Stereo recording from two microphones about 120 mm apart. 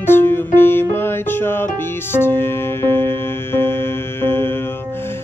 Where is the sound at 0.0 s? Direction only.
20° left (ahead or behind).